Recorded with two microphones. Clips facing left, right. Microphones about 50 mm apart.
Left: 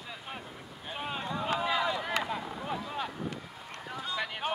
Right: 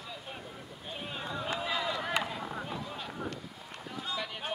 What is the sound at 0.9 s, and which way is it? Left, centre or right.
Boat, left.